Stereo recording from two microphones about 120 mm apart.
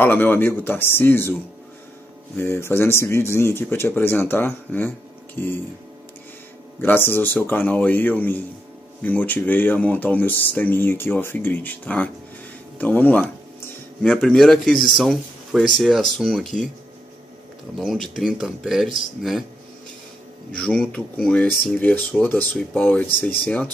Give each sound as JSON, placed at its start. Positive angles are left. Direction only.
{"t": 0.0, "sound": "speech", "side_deg": 15}
{"t": 2.3, "sound": "speech", "side_deg": 20}
{"t": 6.8, "sound": "speech", "side_deg": 15}
{"t": 14.0, "sound": "speech", "side_deg": 5}
{"t": 17.7, "sound": "speech", "side_deg": 0}
{"t": 20.5, "sound": "speech", "side_deg": 10}